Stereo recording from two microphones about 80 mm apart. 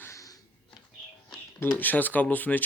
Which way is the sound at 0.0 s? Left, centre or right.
Left.